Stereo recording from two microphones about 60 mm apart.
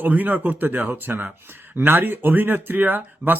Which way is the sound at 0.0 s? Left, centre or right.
Right.